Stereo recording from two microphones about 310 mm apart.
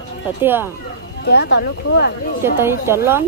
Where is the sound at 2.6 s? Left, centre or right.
Centre.